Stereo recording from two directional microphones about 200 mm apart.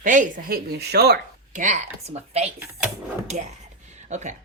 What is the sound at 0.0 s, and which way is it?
Speech, 40° right (ahead or behind).